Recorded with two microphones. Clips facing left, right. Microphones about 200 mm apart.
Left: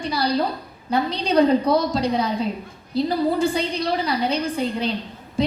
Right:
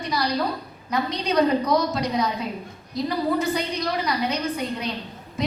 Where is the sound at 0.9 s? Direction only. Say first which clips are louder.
Left 3 dB; 30° left (ahead or behind).